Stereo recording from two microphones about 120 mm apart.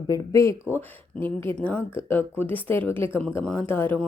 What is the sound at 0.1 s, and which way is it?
Speech, 25° left (ahead or behind).